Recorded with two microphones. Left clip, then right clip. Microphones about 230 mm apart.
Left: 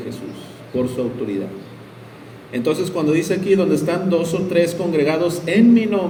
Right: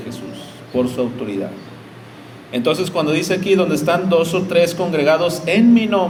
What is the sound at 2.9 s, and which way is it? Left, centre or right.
A man's voice, right.